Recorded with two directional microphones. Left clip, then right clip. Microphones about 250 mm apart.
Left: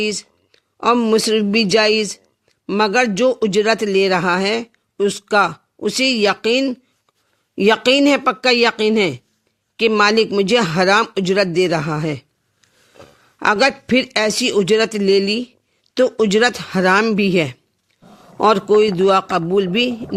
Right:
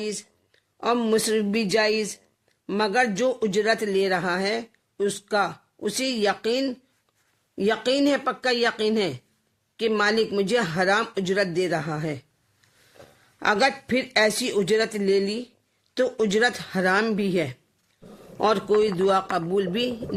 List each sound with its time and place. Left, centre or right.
0.0 s a man's voice: left